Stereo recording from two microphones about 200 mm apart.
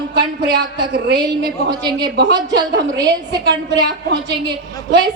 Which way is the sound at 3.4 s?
65° right (ahead or behind).